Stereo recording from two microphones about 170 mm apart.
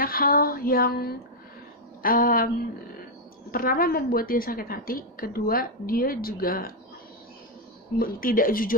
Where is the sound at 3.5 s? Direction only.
60° left (ahead or behind).